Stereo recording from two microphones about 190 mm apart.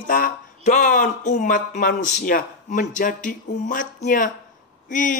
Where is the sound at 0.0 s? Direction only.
45° left (ahead or behind).